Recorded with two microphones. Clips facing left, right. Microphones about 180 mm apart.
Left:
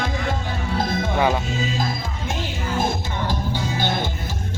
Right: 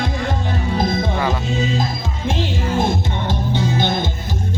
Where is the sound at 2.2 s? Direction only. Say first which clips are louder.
Right 8 dB; 30° right (ahead or behind).